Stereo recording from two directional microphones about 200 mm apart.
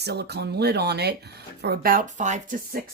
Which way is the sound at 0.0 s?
55° right (ahead or behind).